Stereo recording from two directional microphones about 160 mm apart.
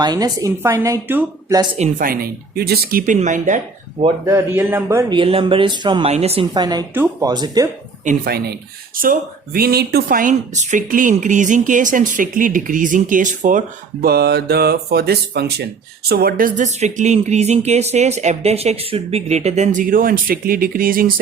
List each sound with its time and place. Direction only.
0.0 s speech: 25° right (ahead or behind)
1.8 s speech: 60° right (ahead or behind); by 3.0 s 80° right
3.1 s speech: 50° right (ahead or behind)
4.3 s a man's voice: 15° right (ahead or behind)
5.1 s speech: 35° right (ahead or behind)
6.1 s speech: 40° right (ahead or behind)
6.5 s speech: 25° right (ahead or behind)
6.9 s a man's voice: 10° right (ahead or behind)
7.3 s speech: 25° right (ahead or behind)
8.0 s speech: 70° right (ahead or behind); by 15.6 s 90° right
16.0 s speech: 70° right (ahead or behind)